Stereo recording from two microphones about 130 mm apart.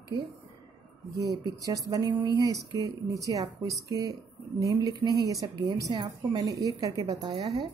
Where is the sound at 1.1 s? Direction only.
25° right (ahead or behind).